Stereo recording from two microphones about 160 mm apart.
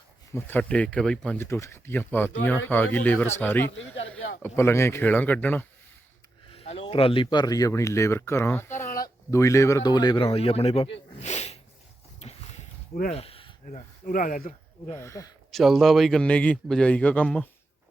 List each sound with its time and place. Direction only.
0.3 s speech: 10° left (ahead or behind)
1.5 s speech: 15° left (ahead or behind)
6.5 s speech: 35° left (ahead or behind)
10.3 s speech: 40° left (ahead or behind)
11.2 s sneeze: 45° left (ahead or behind)
12.2 s a sound: 40° left (ahead or behind)
13.7 s speech: 55° left (ahead or behind)
14.9 s speech: 20° left (ahead or behind)
15.5 s speech: centre (ahead or behind)